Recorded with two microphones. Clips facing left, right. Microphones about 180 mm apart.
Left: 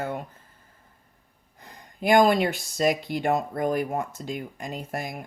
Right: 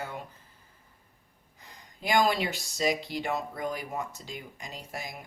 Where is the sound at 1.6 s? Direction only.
55° left (ahead or behind).